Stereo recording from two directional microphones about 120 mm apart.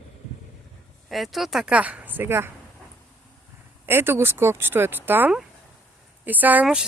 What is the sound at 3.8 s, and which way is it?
Speech, 20° right (ahead or behind).